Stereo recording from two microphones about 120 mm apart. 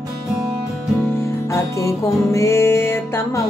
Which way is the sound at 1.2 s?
25° left (ahead or behind).